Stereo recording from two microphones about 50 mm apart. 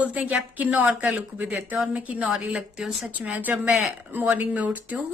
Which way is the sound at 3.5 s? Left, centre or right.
Centre.